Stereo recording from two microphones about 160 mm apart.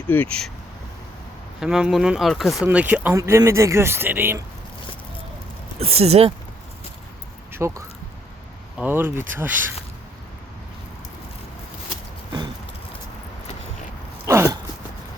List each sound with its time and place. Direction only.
0.1 s speech: 10° left (ahead or behind)
1.6 s speech: centre (ahead or behind)
5.8 s speech: 40° right (ahead or behind)
7.5 s speech: 20° right (ahead or behind)
14.3 s a sound: 20° right (ahead or behind)